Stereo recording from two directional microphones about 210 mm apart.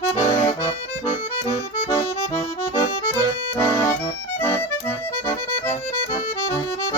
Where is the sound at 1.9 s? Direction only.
20° left (ahead or behind).